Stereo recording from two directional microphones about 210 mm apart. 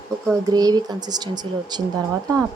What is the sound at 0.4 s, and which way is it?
Speech, 15° right (ahead or behind).